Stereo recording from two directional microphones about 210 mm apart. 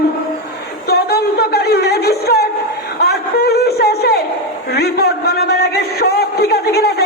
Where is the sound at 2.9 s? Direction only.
50° left (ahead or behind).